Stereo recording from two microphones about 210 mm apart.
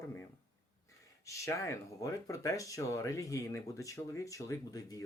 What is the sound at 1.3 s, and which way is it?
Speech, 15° left (ahead or behind).